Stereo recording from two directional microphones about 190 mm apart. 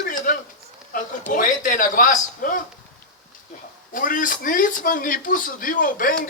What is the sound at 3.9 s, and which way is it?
A man's voice, 45° left (ahead or behind).